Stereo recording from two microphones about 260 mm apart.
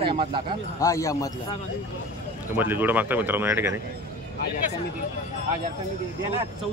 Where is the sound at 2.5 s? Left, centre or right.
Centre.